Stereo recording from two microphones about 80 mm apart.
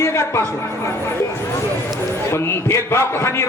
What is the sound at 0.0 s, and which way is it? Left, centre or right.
Speech, left.